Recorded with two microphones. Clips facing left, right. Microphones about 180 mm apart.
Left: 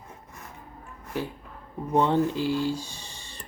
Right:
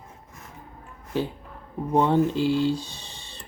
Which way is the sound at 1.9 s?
15° right (ahead or behind).